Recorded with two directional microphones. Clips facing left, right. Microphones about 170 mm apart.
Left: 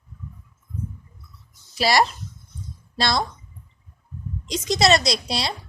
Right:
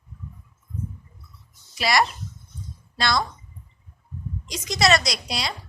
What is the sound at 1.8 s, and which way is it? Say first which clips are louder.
A woman's voice: left 2 dB; 30° left (ahead or behind).